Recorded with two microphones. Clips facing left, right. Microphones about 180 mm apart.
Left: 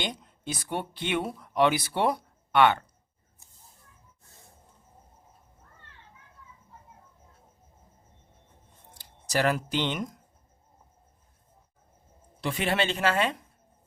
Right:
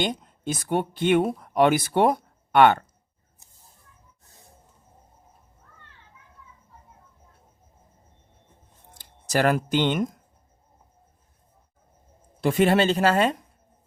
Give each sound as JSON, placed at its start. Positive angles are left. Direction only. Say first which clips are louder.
{"t": 0.0, "sound": "speech", "louder": "right 7 dB", "side_deg": -50}
{"t": 9.0, "sound": "speech", "louder": "right 4 dB", "side_deg": -50}
{"t": 12.4, "sound": "speech", "louder": "right 8 dB", "side_deg": -45}